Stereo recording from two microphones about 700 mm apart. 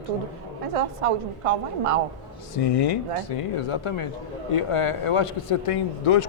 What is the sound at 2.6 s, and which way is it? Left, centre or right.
Speech, left.